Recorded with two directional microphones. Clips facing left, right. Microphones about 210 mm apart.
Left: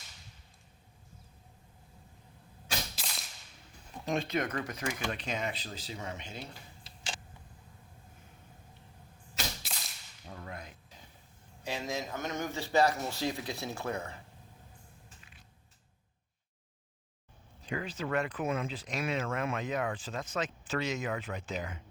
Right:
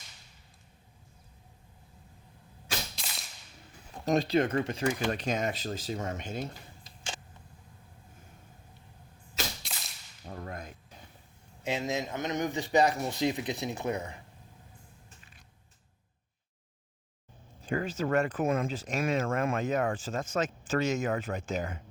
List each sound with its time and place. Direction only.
2.9 s whip: centre (ahead or behind)
4.0 s speech: 40° right (ahead or behind)
5.1 s speech: 45° right (ahead or behind)
9.6 s whip: centre (ahead or behind)
10.2 s whip: 45° right (ahead or behind)
11.6 s speech: 20° right (ahead or behind)
17.6 s speech: 45° right (ahead or behind)